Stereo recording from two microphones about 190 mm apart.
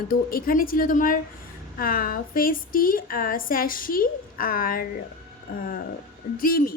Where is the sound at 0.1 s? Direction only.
50° left (ahead or behind).